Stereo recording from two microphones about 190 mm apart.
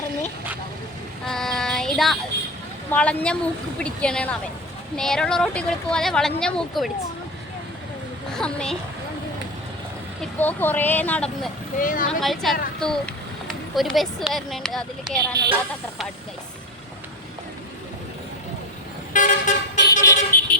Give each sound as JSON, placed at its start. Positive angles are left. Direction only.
{"t": 1.3, "sound": "child singing", "side_deg": 5}
{"t": 2.9, "sound": "speech", "side_deg": 5}
{"t": 8.3, "sound": "speech", "side_deg": 5}
{"t": 10.2, "sound": "speech", "side_deg": 10}
{"t": 11.8, "sound": "speech", "side_deg": 45}
{"t": 12.2, "sound": "speech", "side_deg": 0}
{"t": 19.1, "sound": "vehicle", "side_deg": 45}
{"t": 19.9, "sound": "vehicle", "side_deg": 15}